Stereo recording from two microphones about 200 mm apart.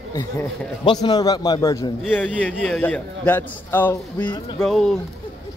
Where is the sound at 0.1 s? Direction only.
20° left (ahead or behind); by 4.9 s centre (ahead or behind).